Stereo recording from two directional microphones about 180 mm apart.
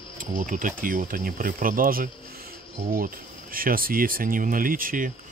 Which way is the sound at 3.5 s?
55° right (ahead or behind).